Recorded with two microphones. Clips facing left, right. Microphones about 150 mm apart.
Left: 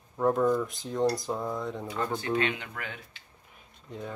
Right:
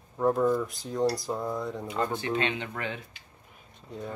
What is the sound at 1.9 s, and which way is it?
Speech, 20° right (ahead or behind).